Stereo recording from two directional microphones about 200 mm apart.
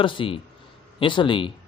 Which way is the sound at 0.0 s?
25° left (ahead or behind).